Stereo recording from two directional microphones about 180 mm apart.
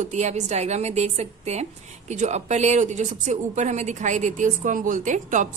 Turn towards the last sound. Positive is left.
turn(degrees=-45)  # may be behind; listen again after turning